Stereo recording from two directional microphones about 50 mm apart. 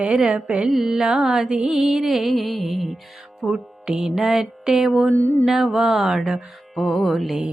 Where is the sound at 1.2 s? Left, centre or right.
Centre.